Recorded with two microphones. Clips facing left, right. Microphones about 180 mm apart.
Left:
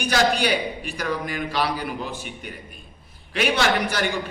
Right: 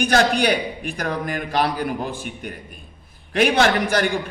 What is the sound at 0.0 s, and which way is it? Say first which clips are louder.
A man's voice: right 3 dB; 55° right (ahead or behind).